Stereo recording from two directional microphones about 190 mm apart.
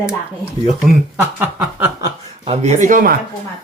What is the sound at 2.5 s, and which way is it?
Speech, 35° right (ahead or behind).